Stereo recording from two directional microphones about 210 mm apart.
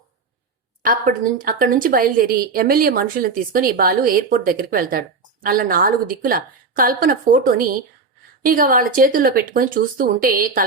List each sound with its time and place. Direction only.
1.4 s a woman's voice: 40° right (ahead or behind)